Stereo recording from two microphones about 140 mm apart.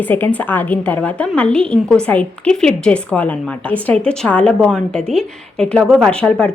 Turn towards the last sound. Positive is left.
turn(degrees=10)  # may be behind; listen again after turning